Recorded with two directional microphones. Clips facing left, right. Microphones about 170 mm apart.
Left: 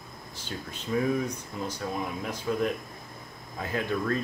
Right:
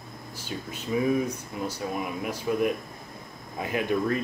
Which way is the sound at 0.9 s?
10° right (ahead or behind).